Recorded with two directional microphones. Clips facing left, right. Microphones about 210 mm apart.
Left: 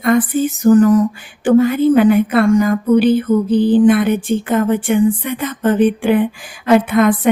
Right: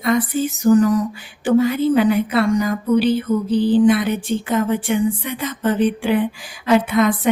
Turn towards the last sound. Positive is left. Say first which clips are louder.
# left 4 dB
turn(degrees=55)  # may be behind; listen again after turning